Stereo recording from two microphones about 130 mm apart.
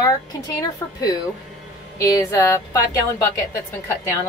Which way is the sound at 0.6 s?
30° left (ahead or behind).